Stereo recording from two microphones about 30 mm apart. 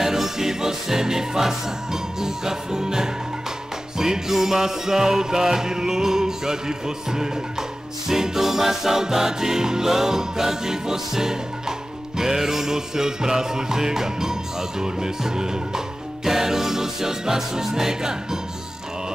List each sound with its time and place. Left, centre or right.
0.0 s music: centre
8.1 s music: centre